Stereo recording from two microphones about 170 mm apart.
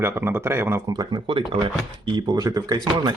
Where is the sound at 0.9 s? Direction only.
25° right (ahead or behind).